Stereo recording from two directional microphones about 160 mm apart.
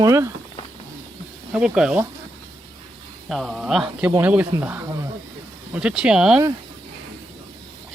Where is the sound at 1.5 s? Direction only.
5° right (ahead or behind).